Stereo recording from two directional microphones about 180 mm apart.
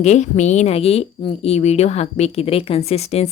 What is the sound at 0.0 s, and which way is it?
A woman's voice, 40° left (ahead or behind).